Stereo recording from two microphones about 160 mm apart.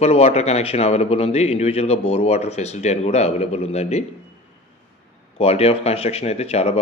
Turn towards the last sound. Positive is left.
turn(degrees=40)  # may be behind; listen again after turning